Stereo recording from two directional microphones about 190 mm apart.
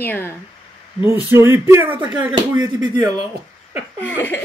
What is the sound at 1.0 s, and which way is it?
Speech, 15° right (ahead or behind).